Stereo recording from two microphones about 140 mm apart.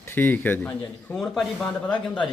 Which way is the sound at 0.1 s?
15° left (ahead or behind).